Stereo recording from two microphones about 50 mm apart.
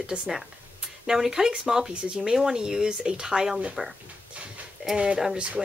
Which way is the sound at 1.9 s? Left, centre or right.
Right.